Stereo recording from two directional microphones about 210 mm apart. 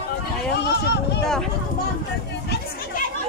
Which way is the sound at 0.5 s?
55° left (ahead or behind).